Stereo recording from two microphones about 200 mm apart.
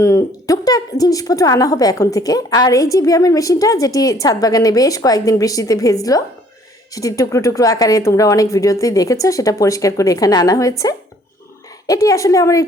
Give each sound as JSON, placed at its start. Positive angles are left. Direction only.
{"t": 0.0, "sound": "a woman's voice", "side_deg": 15}
{"t": 12.0, "sound": "a woman's voice", "side_deg": 15}